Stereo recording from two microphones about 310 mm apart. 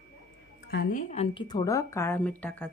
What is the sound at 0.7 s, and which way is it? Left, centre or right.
Speech, left.